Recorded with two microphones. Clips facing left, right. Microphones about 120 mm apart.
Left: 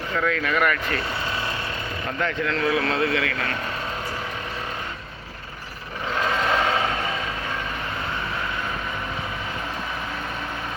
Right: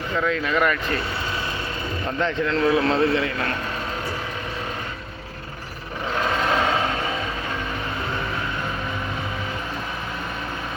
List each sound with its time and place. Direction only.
0.2 s a man's voice: 20° right (ahead or behind)
2.2 s a man's voice: 30° right (ahead or behind)